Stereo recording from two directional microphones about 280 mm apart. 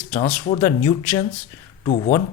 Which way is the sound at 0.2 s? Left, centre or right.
Centre.